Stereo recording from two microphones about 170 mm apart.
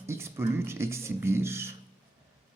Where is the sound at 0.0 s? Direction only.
15° right (ahead or behind).